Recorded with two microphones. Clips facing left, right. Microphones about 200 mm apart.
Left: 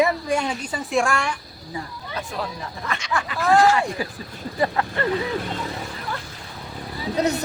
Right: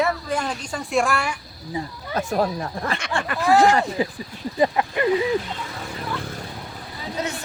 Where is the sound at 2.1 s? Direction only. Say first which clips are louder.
Right 8 dB; 45° right (ahead or behind).